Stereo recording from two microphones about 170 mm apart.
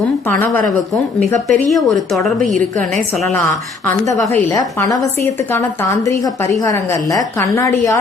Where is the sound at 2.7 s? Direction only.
45° right (ahead or behind).